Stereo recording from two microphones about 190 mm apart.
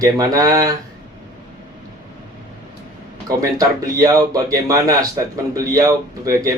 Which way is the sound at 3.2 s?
15° right (ahead or behind).